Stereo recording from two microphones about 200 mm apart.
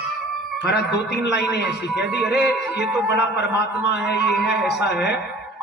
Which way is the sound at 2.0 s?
5° right (ahead or behind).